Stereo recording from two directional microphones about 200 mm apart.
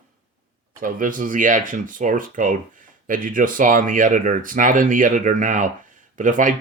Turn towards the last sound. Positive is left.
turn(degrees=-40)  # may be behind; listen again after turning